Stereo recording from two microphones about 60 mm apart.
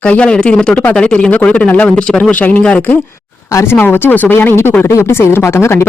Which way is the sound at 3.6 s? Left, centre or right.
Left.